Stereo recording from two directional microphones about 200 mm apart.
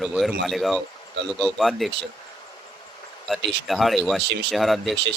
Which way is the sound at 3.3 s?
Centre (ahead or behind).